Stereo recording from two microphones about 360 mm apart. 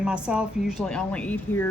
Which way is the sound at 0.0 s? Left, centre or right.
Centre.